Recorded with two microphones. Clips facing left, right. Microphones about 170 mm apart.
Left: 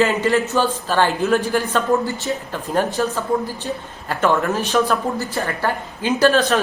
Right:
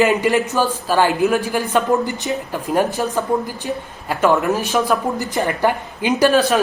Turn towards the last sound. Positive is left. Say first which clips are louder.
# right 1 dB
turn(degrees=-10)  # may be behind; listen again after turning